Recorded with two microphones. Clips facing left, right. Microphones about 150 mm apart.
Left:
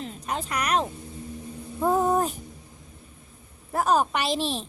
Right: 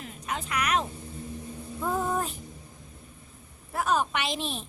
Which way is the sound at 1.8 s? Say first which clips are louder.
Left 7 dB; 40° left (ahead or behind).